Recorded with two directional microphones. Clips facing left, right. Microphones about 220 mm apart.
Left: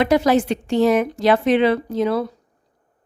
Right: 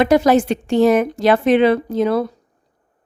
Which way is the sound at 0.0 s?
45° right (ahead or behind).